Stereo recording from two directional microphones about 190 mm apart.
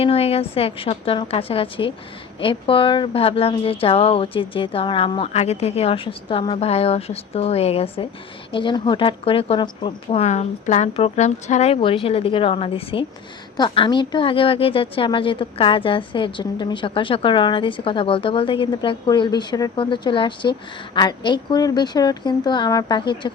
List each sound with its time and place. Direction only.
0.0 s a woman's voice: 30° left (ahead or behind)